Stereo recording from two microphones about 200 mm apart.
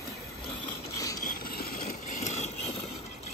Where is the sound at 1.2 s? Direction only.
45° left (ahead or behind).